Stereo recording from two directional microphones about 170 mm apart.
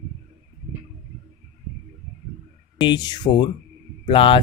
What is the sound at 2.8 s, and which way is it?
Speech, 25° left (ahead or behind).